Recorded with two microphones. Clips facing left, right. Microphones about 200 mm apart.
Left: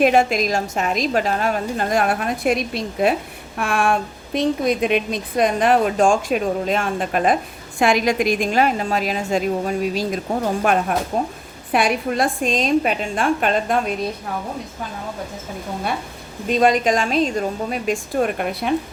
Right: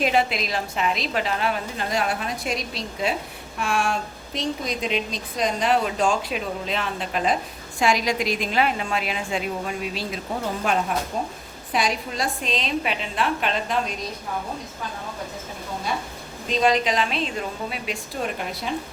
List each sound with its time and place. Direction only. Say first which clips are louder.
0.0 s a woman's voice: left 6 dB; 50° left (ahead or behind)
10.6 s a woman's voice: left 5 dB; 55° left (ahead or behind)
16.5 s a woman's voice: left 5 dB; 50° left (ahead or behind)